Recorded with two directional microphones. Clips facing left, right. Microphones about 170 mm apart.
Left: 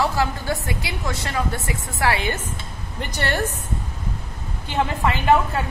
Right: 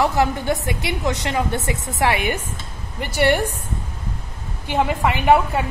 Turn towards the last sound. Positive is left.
turn(degrees=-15)  # may be behind; listen again after turning